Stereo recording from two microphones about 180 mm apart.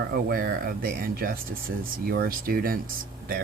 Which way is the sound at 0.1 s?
55° right (ahead or behind).